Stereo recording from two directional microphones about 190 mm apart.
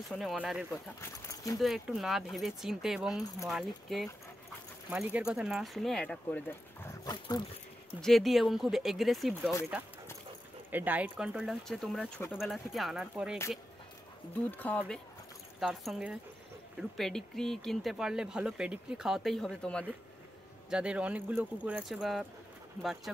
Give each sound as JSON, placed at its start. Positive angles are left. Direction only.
{"t": 0.1, "sound": "speech", "side_deg": 0}
{"t": 1.3, "sound": "a sound", "side_deg": 15}
{"t": 1.6, "sound": "speech", "side_deg": 0}
{"t": 8.0, "sound": "speech", "side_deg": 0}
{"t": 10.7, "sound": "speech", "side_deg": -10}
{"t": 14.5, "sound": "speech", "side_deg": 10}
{"t": 20.7, "sound": "speech", "side_deg": -5}